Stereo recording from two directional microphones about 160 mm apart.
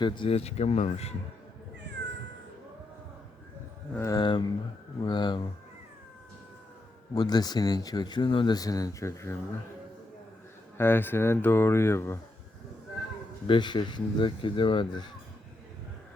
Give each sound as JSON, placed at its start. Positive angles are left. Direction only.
{"t": 0.0, "sound": "speech", "side_deg": 35}
{"t": 3.9, "sound": "speech", "side_deg": 20}
{"t": 7.1, "sound": "speech", "side_deg": 25}
{"t": 10.8, "sound": "speech", "side_deg": 15}
{"t": 13.5, "sound": "speech", "side_deg": 30}